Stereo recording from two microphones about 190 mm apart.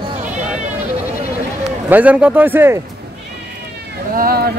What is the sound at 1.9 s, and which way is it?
Speech, 10° right (ahead or behind).